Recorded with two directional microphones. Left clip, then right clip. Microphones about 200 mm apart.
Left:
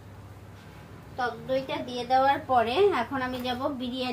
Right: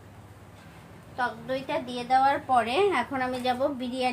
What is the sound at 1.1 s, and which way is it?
A woman's voice, 25° right (ahead or behind).